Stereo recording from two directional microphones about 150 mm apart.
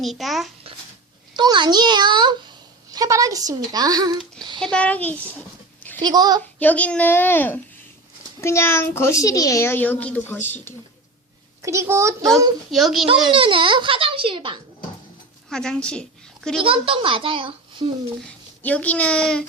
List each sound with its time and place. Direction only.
0.0 s a child's voice: centre (ahead or behind)
1.4 s a child's voice: 30° right (ahead or behind)
4.6 s a child's voice: 10° left (ahead or behind)
6.0 s a child's voice: 25° right (ahead or behind)
6.6 s a child's voice: 10° left (ahead or behind)
11.6 s a child's voice: 20° right (ahead or behind)
12.7 s a child's voice: centre (ahead or behind)
13.3 s a child's voice: 35° right (ahead or behind)
15.4 s a woman's voice: 5° left (ahead or behind)
16.6 s a child's voice: 35° right (ahead or behind)
18.3 s speech: 10° left (ahead or behind)